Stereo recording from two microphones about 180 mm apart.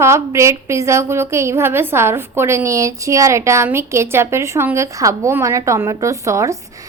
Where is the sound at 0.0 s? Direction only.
15° right (ahead or behind).